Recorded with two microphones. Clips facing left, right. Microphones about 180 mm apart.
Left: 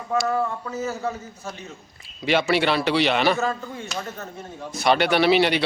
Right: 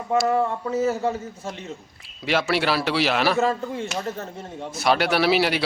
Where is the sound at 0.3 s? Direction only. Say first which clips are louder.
Right 3 dB; 25° right (ahead or behind).